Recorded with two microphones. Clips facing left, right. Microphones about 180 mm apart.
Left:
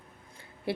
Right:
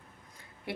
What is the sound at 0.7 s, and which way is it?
Speech, 30° left (ahead or behind).